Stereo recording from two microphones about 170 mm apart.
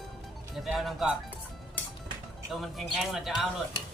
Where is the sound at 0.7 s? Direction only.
Centre (ahead or behind).